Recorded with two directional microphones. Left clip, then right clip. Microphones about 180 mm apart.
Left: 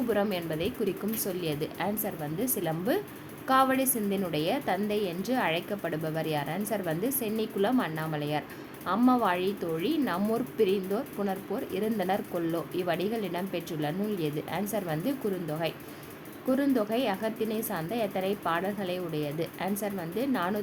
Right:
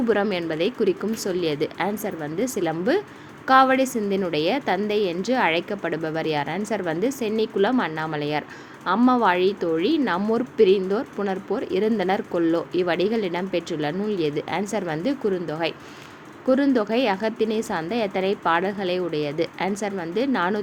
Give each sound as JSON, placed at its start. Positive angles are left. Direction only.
{"t": 0.1, "sound": "speech", "side_deg": -20}